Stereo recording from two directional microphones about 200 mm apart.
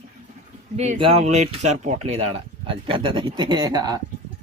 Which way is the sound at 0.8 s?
30° right (ahead or behind).